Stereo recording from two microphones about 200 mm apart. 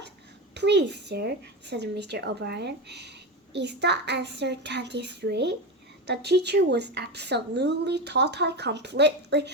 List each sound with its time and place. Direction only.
0.5 s speech: 60° right (ahead or behind)